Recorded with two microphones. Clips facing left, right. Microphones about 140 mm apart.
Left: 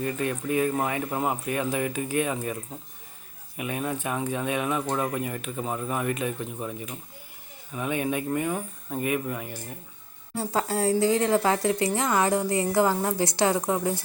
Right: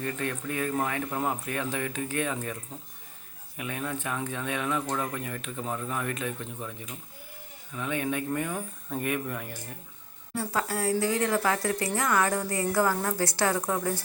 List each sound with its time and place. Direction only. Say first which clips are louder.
0.0 s speech: left 4 dB; 15° left (ahead or behind)
3.6 s speech: left 4 dB; 15° left (ahead or behind)
10.3 s a woman's voice: left 3 dB; 25° left (ahead or behind)